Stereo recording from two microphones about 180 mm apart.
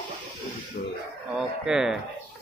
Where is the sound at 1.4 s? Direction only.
Centre (ahead or behind).